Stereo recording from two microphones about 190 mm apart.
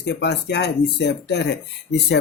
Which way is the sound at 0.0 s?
65° left (ahead or behind).